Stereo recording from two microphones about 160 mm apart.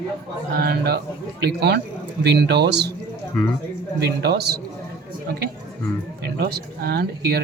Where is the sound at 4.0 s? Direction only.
90° right.